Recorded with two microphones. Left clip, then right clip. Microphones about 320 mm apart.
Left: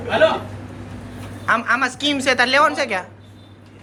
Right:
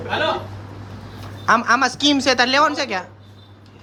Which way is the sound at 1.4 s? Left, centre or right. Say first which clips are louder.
Right 2 dB; centre.